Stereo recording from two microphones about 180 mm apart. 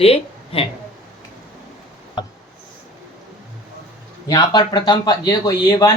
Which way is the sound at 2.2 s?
25° left (ahead or behind).